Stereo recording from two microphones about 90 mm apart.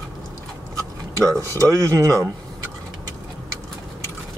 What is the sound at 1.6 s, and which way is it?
Speech, 35° right (ahead or behind).